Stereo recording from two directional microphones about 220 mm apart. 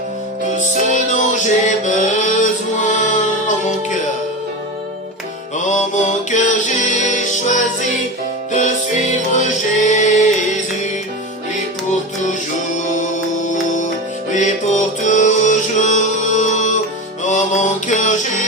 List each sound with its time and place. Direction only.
0.9 s music: 35° left (ahead or behind)
5.6 s music: 35° left (ahead or behind)
13.5 s music: 35° left (ahead or behind)
17.2 s mantra: 35° left (ahead or behind)